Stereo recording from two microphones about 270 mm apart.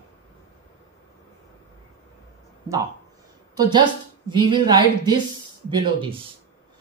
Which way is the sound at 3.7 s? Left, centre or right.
Centre.